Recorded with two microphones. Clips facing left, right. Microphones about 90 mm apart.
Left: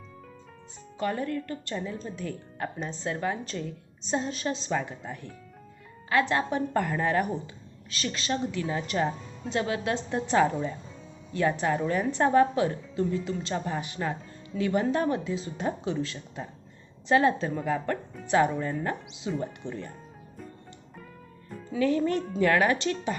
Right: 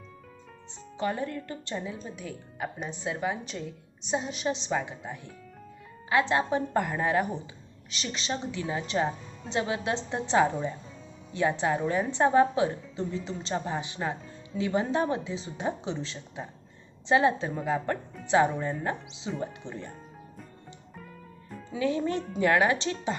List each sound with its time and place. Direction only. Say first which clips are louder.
0.9 s a woman's voice: left 1 dB; 20° right (ahead or behind)
1.7 s a woman's voice: left 1 dB; 10° right (ahead or behind)
17.8 s music: left 1 dB; 20° right (ahead or behind)
18.6 s a woman's voice: left 1 dB; 15° right (ahead or behind)
19.6 s speech: left 3 dB; 35° right (ahead or behind)
21.7 s a woman's voice: left 3 dB; 20° right (ahead or behind)